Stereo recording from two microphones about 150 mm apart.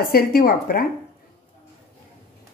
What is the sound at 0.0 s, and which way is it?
Speech, 80° left.